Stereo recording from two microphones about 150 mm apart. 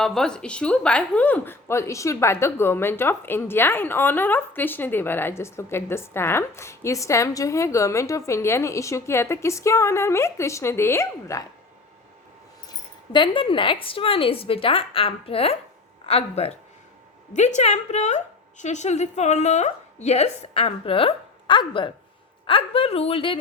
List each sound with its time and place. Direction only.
0.0 s a woman's voice: 5° left (ahead or behind); by 11.4 s 20° left (ahead or behind)
13.1 s a woman's voice: 35° left (ahead or behind)